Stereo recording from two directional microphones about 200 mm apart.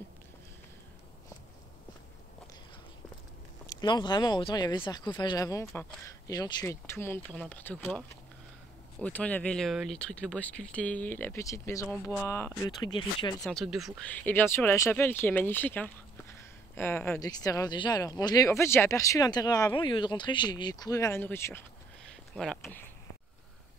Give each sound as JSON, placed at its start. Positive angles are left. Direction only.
{"t": 3.6, "sound": "speech", "side_deg": 20}
{"t": 9.0, "sound": "speech", "side_deg": 5}
{"t": 11.9, "sound": "speech", "side_deg": 5}
{"t": 12.3, "sound": "speech", "side_deg": 15}
{"t": 13.4, "sound": "speech", "side_deg": 0}
{"t": 14.1, "sound": "speech", "side_deg": 10}